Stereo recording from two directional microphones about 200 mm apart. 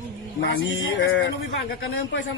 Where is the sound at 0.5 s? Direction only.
70° left (ahead or behind).